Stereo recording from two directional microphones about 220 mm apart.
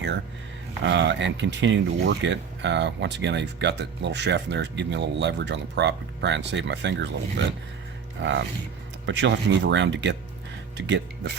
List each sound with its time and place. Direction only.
0.8 s speech: 55° right (ahead or behind)